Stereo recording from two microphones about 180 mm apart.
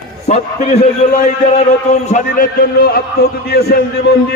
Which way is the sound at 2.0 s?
45° left (ahead or behind).